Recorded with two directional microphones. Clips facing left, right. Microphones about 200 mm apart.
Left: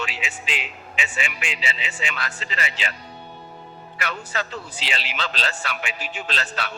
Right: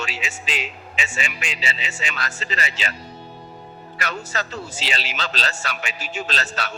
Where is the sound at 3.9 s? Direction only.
40° right (ahead or behind).